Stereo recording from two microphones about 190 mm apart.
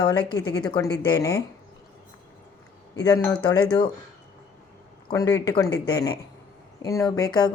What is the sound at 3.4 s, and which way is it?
Speech, 20° left (ahead or behind).